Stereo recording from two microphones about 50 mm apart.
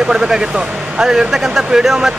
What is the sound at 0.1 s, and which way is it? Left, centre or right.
Speech, centre.